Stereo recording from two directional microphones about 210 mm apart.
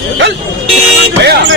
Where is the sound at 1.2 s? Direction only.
55° right (ahead or behind).